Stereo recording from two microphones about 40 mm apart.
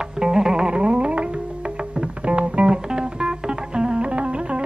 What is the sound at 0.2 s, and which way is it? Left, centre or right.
Music, centre.